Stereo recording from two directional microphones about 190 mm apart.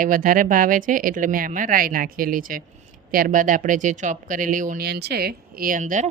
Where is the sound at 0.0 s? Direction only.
45° right (ahead or behind).